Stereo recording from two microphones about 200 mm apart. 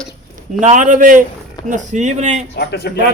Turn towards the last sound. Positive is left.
turn(degrees=55)  # may be behind; listen again after turning